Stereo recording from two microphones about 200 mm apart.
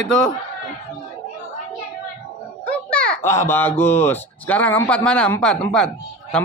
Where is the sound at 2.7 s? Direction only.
5° left (ahead or behind).